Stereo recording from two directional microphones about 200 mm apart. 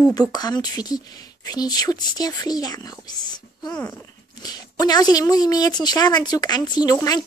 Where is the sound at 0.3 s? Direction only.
20° left (ahead or behind).